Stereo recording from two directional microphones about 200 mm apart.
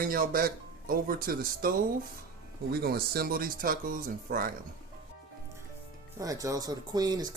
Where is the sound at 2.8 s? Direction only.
50° right (ahead or behind).